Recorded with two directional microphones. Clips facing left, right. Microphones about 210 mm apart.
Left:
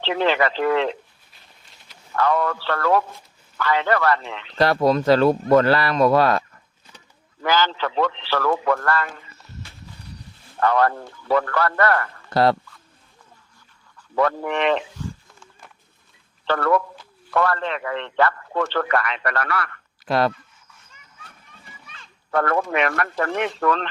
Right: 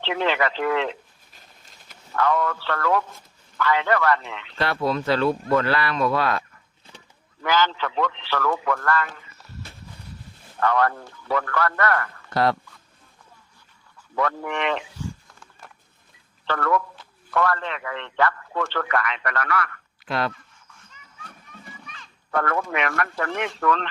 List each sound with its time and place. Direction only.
0.0 s speech: 35° left (ahead or behind)
2.1 s speech: 35° left (ahead or behind)
7.4 s speech: 35° left (ahead or behind)
10.6 s speech: 35° left (ahead or behind)
14.2 s speech: 35° left (ahead or behind)
16.5 s speech: 35° left (ahead or behind)
22.4 s speech: 30° left (ahead or behind)